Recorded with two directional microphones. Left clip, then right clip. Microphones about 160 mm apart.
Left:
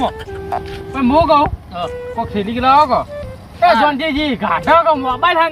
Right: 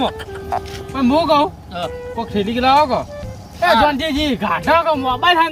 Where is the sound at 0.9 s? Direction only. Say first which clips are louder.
Left 3 dB; 25° right (ahead or behind).